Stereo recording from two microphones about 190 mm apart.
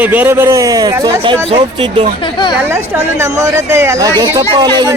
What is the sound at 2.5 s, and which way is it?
A man's voice, 10° right (ahead or behind).